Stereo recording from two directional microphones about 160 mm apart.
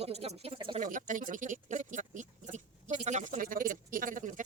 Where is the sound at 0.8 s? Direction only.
55° right (ahead or behind).